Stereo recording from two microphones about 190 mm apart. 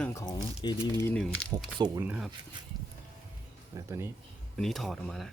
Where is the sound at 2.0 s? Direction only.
5° right (ahead or behind).